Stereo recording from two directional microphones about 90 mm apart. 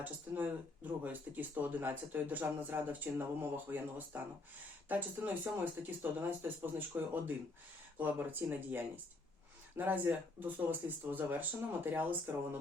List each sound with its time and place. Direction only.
0.0 s speech: 20° right (ahead or behind)